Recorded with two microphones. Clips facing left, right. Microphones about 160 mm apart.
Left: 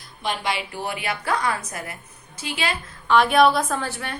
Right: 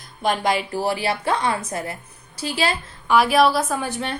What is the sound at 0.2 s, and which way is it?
A woman's voice, 45° right (ahead or behind).